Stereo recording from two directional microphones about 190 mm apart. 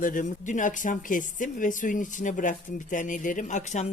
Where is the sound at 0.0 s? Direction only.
45° left (ahead or behind).